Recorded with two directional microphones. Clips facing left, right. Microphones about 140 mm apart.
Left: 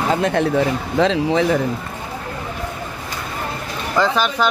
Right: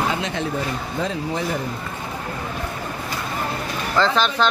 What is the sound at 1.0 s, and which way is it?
Speech, 90° left.